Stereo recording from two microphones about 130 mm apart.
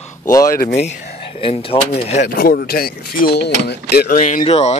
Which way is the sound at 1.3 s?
45° left (ahead or behind).